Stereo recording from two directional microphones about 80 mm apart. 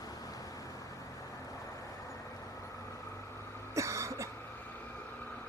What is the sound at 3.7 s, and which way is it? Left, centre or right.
Cough, right.